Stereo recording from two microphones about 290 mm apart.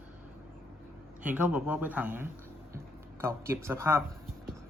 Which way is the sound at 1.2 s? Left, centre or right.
Centre.